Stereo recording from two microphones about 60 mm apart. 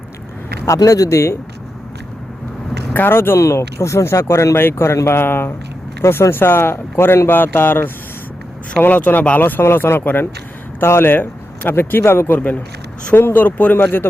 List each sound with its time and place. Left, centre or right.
0.6 s speech: left
2.9 s speech: left
3.3 s speech: left
12.4 s speech: left